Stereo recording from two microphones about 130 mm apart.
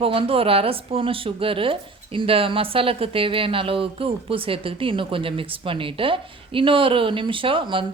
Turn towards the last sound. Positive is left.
turn(degrees=-40)  # may be behind; listen again after turning